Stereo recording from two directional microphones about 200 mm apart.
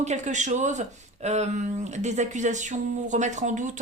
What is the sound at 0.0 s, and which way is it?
Speech, 35° right (ahead or behind).